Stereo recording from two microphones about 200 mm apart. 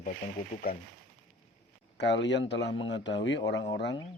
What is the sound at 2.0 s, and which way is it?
Speech, 60° left (ahead or behind).